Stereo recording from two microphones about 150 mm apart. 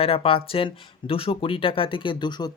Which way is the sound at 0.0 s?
40° left (ahead or behind).